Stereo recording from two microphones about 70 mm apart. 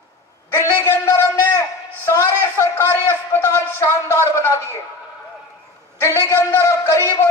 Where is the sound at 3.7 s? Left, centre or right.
Left.